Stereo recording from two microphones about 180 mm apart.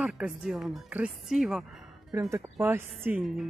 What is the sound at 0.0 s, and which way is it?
Speech, 5° right (ahead or behind).